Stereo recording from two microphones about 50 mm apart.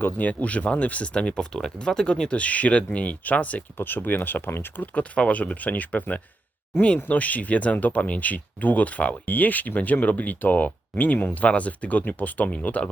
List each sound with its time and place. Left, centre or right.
0.0 s speech: left; by 2.4 s centre
2.4 s speech: left
3.8 s speech: left
4.8 s speech: left